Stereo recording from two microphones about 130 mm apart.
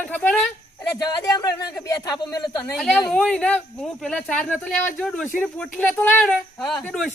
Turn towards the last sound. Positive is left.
turn(degrees=10)  # may be behind; listen again after turning